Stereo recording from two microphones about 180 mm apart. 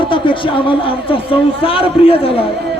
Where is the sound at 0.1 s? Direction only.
30° left (ahead or behind).